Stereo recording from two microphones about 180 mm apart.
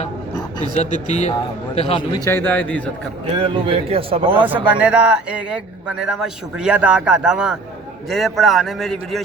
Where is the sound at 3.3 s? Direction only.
30° right (ahead or behind).